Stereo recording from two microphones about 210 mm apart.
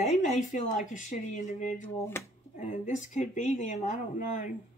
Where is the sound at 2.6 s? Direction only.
35° left (ahead or behind).